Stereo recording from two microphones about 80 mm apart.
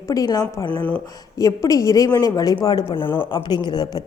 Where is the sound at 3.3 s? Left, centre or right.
Left.